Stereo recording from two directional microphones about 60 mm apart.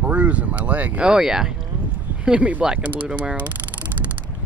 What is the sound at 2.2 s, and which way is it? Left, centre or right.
Speech, right.